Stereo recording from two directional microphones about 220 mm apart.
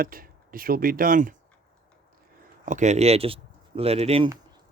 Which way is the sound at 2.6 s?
35° right (ahead or behind).